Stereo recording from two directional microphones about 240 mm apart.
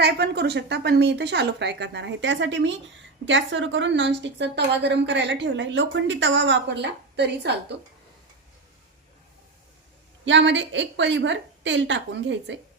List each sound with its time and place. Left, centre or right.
0.0 s a woman's voice: right
10.2 s a woman's voice: right